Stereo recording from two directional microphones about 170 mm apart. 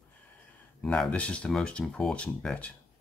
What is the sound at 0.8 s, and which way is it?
Speech, 5° left (ahead or behind).